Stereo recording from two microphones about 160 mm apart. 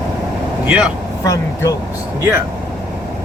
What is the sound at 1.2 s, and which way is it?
Speech, 20° left (ahead or behind).